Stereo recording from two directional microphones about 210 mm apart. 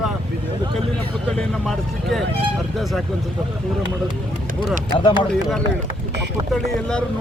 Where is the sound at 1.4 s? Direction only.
Centre (ahead or behind).